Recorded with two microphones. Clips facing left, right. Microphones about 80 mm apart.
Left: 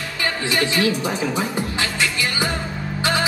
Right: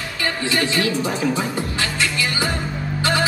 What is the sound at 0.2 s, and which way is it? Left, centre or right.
Speech, left.